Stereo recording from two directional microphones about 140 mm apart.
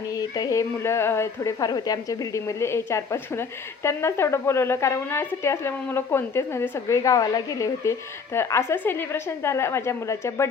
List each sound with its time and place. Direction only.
0.1 s a woman's voice: 25° left (ahead or behind)